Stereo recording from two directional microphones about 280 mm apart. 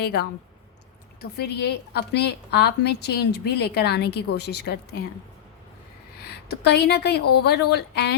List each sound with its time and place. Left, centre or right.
0.0 s a woman's voice: left
6.2 s a woman's voice: left